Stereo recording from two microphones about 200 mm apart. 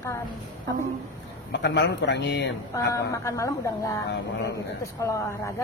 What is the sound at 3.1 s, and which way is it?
Speech, 15° left (ahead or behind).